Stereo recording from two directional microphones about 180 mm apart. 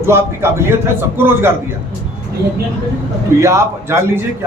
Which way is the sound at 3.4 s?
15° right (ahead or behind).